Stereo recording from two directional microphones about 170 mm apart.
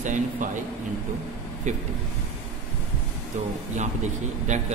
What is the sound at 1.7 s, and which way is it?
Speech, 45° right (ahead or behind).